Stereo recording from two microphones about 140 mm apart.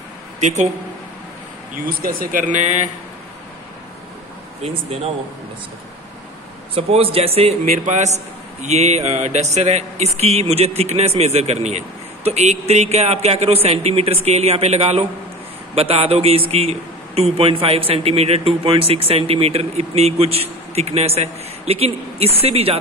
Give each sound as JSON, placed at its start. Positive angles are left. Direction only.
{"t": 0.4, "sound": "speech", "side_deg": -55}
{"t": 1.9, "sound": "speech", "side_deg": -90}
{"t": 6.7, "sound": "a man's voice", "side_deg": -45}
{"t": 7.7, "sound": "a man's voice", "side_deg": -55}